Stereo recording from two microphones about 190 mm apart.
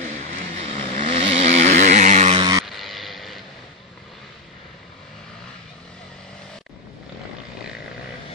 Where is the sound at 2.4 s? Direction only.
20° right (ahead or behind).